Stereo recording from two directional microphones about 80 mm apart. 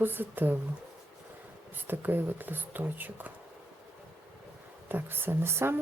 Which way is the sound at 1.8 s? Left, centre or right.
Right.